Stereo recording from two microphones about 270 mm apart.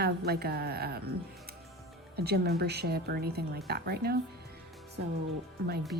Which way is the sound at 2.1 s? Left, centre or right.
Right.